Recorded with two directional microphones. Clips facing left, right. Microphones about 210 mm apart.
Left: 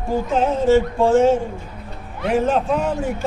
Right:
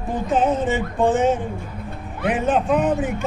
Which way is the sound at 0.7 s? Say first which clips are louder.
Left 5 dB; 15° right (ahead or behind).